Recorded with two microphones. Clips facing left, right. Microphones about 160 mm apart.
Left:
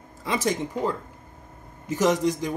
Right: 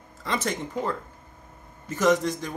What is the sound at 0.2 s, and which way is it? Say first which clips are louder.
A man's voice: left 3 dB; 10° left (ahead or behind).